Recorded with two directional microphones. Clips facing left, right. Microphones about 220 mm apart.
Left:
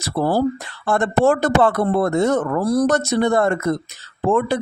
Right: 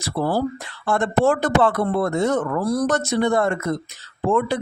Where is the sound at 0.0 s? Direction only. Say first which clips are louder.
Left 3 dB; 40° left (ahead or behind).